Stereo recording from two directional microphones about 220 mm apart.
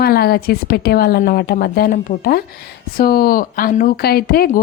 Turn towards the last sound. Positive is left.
turn(degrees=45)  # may be behind; listen again after turning